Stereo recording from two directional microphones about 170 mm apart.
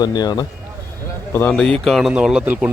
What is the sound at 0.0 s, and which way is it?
Speech, 25° left (ahead or behind).